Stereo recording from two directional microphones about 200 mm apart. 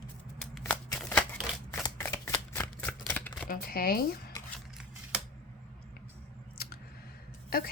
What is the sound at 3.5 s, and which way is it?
Speech, 45° left (ahead or behind).